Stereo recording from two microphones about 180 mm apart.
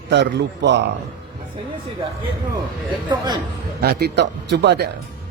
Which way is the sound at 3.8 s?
65° right (ahead or behind).